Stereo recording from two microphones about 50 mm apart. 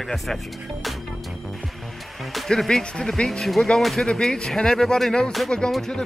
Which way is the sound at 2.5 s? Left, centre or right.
Centre.